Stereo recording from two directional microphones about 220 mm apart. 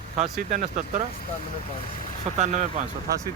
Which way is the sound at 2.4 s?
35° right (ahead or behind).